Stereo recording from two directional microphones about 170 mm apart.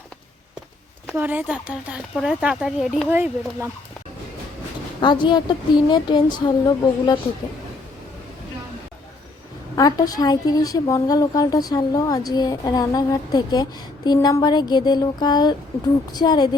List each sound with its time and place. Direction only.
1.1 s speech: 10° right (ahead or behind)
3.1 s speech: 15° right (ahead or behind)
4.9 s a woman's voice: 25° left (ahead or behind)
9.7 s a woman's voice: 20° left (ahead or behind)